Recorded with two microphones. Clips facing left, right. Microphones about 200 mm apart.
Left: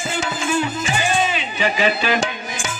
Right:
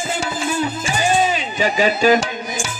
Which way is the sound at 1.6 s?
40° right (ahead or behind).